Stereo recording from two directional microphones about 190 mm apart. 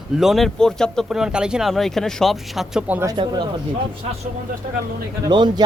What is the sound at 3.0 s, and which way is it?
Speech, 20° right (ahead or behind).